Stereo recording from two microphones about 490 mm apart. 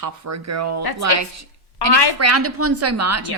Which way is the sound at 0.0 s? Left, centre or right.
Right.